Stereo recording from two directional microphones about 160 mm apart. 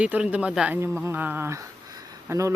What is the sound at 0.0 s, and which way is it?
Speech, 10° right (ahead or behind).